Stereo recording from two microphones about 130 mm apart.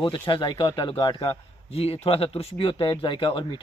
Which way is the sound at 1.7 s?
50° left (ahead or behind).